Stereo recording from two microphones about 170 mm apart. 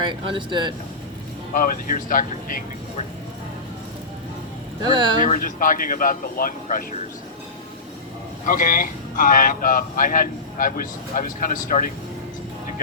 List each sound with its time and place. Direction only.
0.1 s speech: 30° right (ahead or behind)
1.5 s speech: 55° left (ahead or behind)
4.8 s speech: 25° right (ahead or behind)
5.2 s speech: 55° left (ahead or behind)
8.4 s speech: 55° left (ahead or behind)